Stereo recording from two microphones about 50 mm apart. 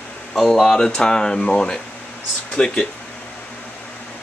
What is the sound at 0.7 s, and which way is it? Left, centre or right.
Speech, centre.